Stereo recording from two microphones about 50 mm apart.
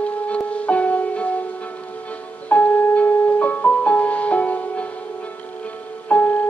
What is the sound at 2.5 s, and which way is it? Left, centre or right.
Music, left.